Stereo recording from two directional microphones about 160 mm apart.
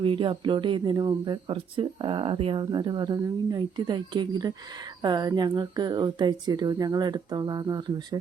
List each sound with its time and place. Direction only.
0.0 s speech: 30° right (ahead or behind)